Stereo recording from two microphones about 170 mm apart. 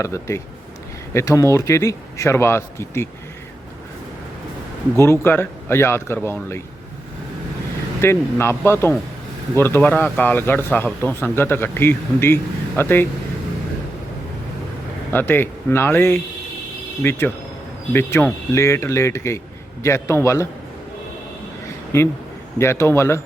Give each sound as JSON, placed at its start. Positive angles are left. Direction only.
{"t": 0.0, "sound": "speech", "side_deg": 15}
{"t": 5.2, "sound": "speech", "side_deg": 15}
{"t": 8.0, "sound": "speech", "side_deg": 15}
{"t": 15.1, "sound": "speech", "side_deg": 10}
{"t": 21.9, "sound": "speech", "side_deg": 20}